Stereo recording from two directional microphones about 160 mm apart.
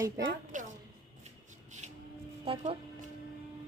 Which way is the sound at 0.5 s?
55° right (ahead or behind).